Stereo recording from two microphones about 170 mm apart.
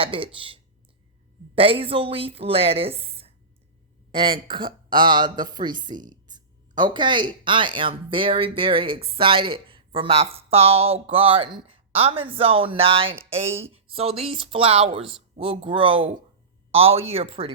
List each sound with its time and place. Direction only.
0.0 s speech: 30° right (ahead or behind)